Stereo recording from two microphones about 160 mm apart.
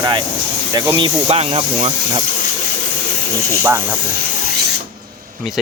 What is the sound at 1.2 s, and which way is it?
Speech, 40° right (ahead or behind).